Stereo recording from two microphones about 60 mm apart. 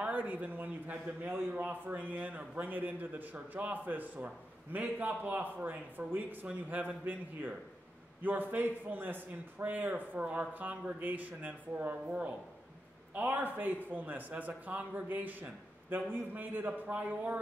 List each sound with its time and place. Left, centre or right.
0.0 s a man's voice: right
10.2 s speech: centre
10.5 s speech: right
13.1 s speech: right